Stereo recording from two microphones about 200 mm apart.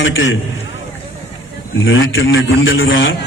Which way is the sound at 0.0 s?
70° left (ahead or behind).